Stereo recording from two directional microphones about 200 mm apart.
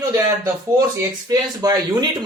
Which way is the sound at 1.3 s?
20° right (ahead or behind).